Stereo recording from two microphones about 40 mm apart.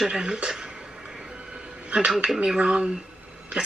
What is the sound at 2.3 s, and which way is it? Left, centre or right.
Speech, right.